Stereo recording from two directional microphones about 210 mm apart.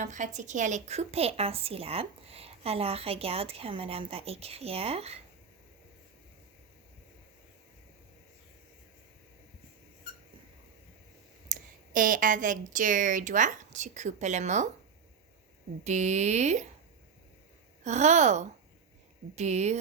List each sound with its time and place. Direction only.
0.0 s a woman's voice: 35° right (ahead or behind)
11.4 s a woman's voice: 40° right (ahead or behind)
15.8 s speech: 35° right (ahead or behind)
17.8 s speech: 35° right (ahead or behind)